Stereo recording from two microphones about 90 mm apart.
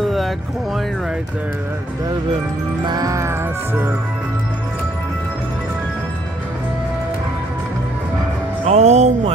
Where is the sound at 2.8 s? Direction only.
45° right (ahead or behind); by 4.0 s 25° right (ahead or behind).